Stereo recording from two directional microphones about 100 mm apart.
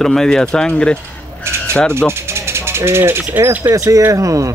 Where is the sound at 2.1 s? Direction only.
25° right (ahead or behind).